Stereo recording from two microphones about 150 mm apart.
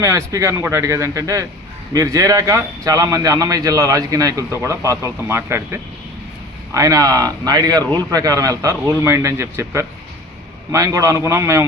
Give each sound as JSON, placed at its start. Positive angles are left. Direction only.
{"t": 0.0, "sound": "a man's voice", "side_deg": -20}